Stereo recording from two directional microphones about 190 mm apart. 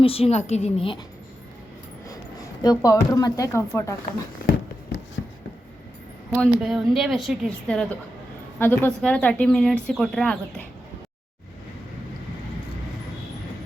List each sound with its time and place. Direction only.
0.0 s a woman's voice: 30° left (ahead or behind)
2.0 s speech: 20° left (ahead or behind)
5.2 s a sound: 70° left (ahead or behind)
6.3 s speech: centre (ahead or behind)